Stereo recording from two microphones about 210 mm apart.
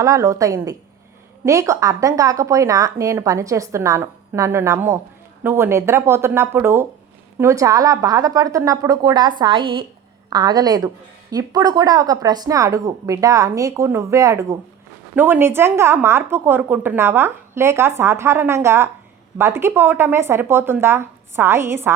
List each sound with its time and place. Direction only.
0.0 s a woman's voice: 15° right (ahead or behind)